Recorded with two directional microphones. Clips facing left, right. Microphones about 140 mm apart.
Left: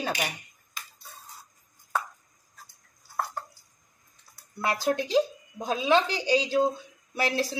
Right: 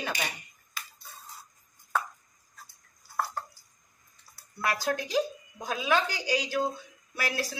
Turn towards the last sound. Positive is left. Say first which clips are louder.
# left 5 dB
turn(degrees=30)  # may be behind; listen again after turning